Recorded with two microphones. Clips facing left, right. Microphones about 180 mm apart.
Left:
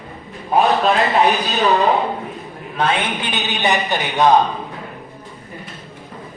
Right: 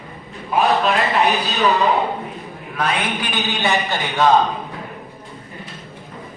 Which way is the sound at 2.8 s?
25° left (ahead or behind).